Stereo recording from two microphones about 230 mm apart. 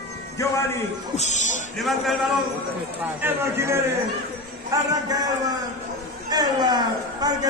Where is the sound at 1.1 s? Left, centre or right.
Left.